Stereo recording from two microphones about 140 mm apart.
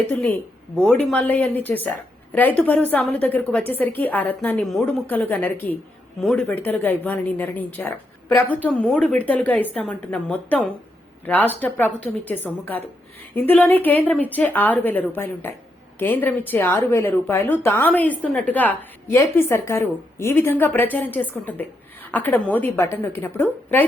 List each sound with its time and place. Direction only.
0.1 s a woman's voice: 10° left (ahead or behind)